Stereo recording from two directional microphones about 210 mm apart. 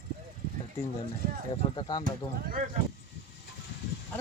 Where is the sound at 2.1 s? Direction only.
45° right (ahead or behind).